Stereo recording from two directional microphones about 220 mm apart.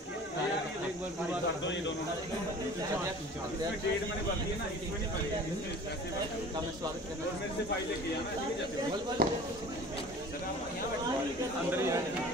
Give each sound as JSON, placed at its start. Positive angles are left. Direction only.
{"t": 9.2, "sound": "speech", "side_deg": -40}
{"t": 11.7, "sound": "speech", "side_deg": -10}